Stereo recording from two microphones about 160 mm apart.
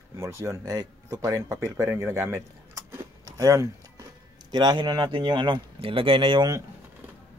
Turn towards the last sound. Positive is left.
turn(degrees=-25)  # may be behind; listen again after turning